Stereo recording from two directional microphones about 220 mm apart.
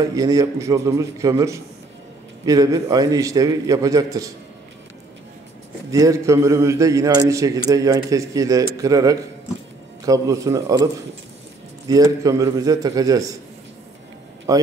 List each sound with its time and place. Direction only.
0.0 s a man's voice: 15° right (ahead or behind)
5.9 s a man's voice: 15° right (ahead or behind)
11.9 s a man's voice: 15° right (ahead or behind)
14.5 s a man's voice: 15° right (ahead or behind)